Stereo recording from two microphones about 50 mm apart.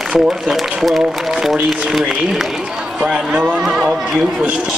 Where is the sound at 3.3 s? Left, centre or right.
Right.